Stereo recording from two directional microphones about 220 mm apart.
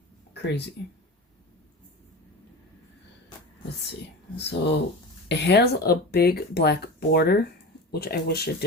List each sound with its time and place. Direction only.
0.4 s speech: 50° left (ahead or behind)
4.4 s speech: 50° left (ahead or behind)